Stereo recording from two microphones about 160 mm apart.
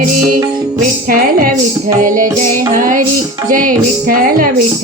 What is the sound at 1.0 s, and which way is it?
A woman's voice, 60° right (ahead or behind).